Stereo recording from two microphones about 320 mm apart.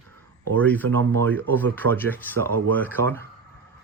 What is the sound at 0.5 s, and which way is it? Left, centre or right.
Speech, centre.